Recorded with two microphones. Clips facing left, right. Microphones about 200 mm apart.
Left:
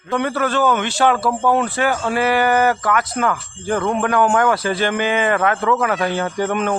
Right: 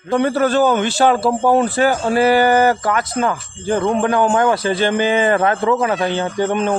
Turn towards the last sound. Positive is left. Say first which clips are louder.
# right 2 dB
turn(degrees=-30)  # may be behind; listen again after turning